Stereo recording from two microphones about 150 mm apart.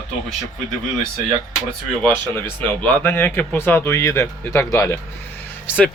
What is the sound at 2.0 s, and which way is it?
Speech, 10° left (ahead or behind).